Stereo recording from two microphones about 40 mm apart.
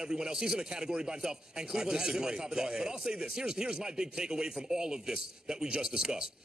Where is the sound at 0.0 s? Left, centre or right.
Centre.